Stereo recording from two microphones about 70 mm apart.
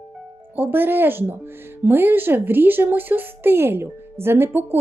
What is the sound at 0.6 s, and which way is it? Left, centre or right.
Speech, right.